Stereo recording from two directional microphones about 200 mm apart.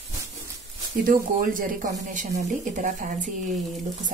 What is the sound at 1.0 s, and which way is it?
Speech, 45° right (ahead or behind).